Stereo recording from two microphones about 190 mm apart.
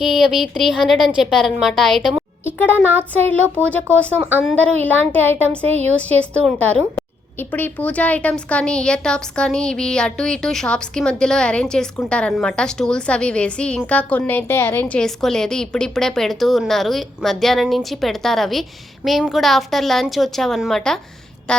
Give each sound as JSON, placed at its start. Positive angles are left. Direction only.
{"t": 0.0, "sound": "a woman's voice", "side_deg": 0}
{"t": 2.6, "sound": "speech", "side_deg": 10}
{"t": 4.4, "sound": "speech", "side_deg": 10}
{"t": 5.5, "sound": "a woman's voice", "side_deg": -35}
{"t": 6.0, "sound": "a woman's voice", "side_deg": 5}